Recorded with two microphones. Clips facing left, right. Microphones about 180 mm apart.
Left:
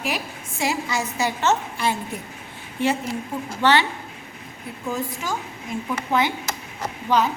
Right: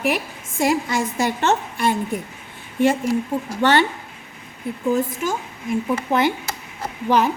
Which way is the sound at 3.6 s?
50° right (ahead or behind).